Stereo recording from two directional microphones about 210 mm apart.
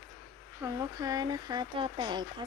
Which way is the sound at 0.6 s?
15° right (ahead or behind).